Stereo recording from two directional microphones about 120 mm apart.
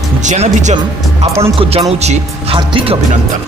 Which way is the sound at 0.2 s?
90° right.